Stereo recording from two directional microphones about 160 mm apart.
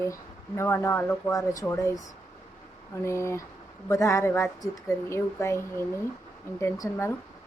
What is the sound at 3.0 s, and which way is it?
A woman's voice, 15° left (ahead or behind).